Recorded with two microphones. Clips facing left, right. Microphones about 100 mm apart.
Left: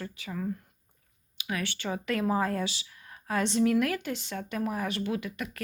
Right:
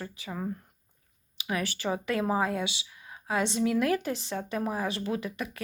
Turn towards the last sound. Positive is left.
turn(degrees=-30)  # may be behind; listen again after turning